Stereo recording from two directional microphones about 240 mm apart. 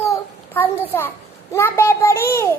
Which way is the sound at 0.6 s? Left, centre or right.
Centre.